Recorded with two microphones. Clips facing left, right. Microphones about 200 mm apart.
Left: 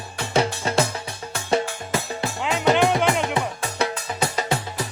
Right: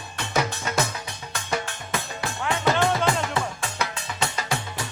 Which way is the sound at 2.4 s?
20° left (ahead or behind).